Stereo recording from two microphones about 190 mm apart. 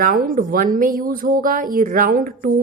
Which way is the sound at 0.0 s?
50° right (ahead or behind).